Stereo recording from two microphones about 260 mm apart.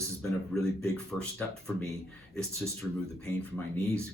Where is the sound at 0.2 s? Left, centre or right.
Centre.